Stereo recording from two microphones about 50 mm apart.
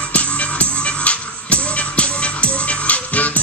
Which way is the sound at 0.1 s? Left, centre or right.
Left.